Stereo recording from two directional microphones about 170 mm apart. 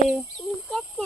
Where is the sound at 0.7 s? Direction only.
Centre (ahead or behind).